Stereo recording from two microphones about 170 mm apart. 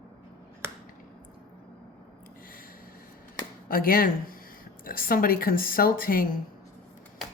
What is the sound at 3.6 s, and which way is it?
Speech, 55° left (ahead or behind).